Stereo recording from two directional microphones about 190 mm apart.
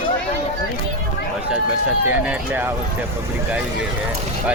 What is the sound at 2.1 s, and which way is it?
Speech, 10° right (ahead or behind).